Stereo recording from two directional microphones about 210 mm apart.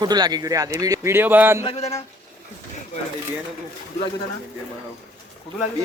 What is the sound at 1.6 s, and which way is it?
Mantra, 30° left (ahead or behind).